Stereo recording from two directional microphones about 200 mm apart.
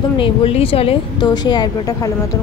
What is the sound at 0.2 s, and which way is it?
A woman's voice, 30° left (ahead or behind).